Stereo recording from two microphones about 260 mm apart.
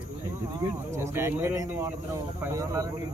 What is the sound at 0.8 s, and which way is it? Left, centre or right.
Speech, centre.